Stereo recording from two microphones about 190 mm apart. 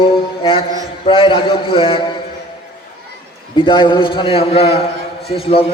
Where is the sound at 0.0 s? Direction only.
25° left (ahead or behind).